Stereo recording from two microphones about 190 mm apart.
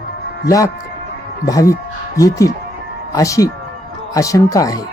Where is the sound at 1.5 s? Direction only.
15° left (ahead or behind).